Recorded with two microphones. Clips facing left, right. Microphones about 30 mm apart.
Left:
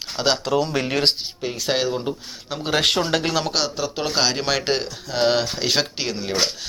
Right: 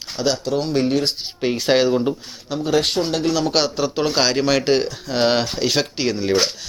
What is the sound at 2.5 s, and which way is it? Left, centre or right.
Speech, centre.